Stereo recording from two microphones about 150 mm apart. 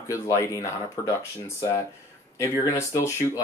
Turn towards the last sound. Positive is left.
turn(degrees=20)  # may be behind; listen again after turning